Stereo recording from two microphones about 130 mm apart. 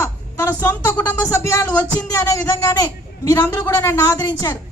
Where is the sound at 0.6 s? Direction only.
15° left (ahead or behind).